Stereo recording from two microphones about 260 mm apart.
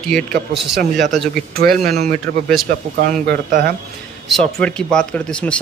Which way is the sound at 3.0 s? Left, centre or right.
Right.